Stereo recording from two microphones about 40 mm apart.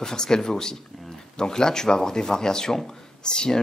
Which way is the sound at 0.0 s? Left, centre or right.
Centre.